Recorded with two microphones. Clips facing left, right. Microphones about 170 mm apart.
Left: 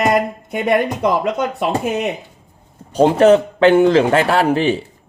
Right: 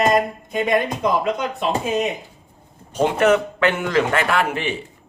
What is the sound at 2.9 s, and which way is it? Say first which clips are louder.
Speech: left 6 dB; 35° left (ahead or behind).